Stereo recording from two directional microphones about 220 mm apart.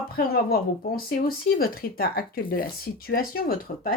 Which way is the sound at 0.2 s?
45° left (ahead or behind).